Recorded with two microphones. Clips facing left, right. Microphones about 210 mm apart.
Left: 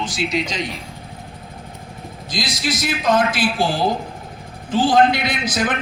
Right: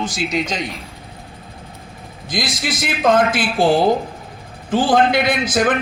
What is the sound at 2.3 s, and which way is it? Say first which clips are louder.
A man's voice: right 1 dB; 50° right (ahead or behind).